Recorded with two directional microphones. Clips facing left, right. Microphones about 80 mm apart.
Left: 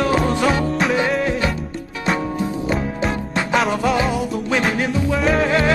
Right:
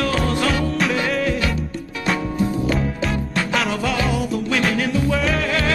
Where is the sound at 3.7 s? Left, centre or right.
Left.